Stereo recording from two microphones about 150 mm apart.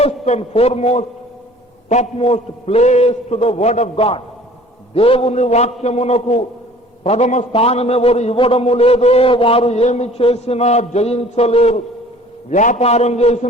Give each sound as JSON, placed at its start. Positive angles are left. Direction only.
{"t": 0.0, "sound": "a man's voice", "side_deg": 45}
{"t": 12.5, "sound": "a man's voice", "side_deg": 55}